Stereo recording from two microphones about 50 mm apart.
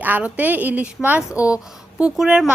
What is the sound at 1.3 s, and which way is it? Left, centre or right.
Speech, right.